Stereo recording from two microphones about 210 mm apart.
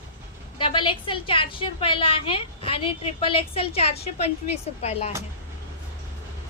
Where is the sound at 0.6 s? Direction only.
25° left (ahead or behind).